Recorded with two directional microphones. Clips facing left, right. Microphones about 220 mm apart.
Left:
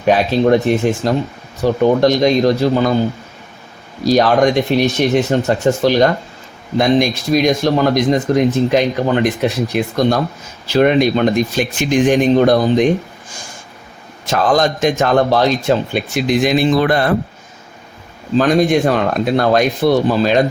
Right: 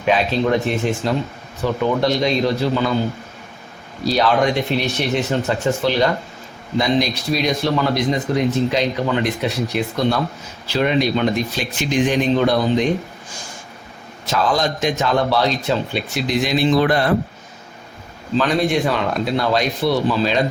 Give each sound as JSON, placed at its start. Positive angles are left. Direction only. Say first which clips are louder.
{"t": 0.0, "sound": "speech", "louder": "left 5 dB", "side_deg": 45}
{"t": 1.6, "sound": "speech", "louder": "left 6 dB", "side_deg": 45}
{"t": 4.0, "sound": "speech", "louder": "left 5 dB", "side_deg": 45}
{"t": 14.3, "sound": "speech", "louder": "left 5 dB", "side_deg": 50}
{"t": 18.3, "sound": "speech", "louder": "left 5 dB", "side_deg": 45}